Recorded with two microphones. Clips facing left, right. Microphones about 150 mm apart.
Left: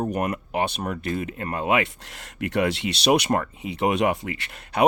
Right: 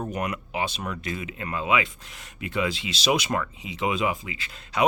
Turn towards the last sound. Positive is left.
turn(degrees=60)  # may be behind; listen again after turning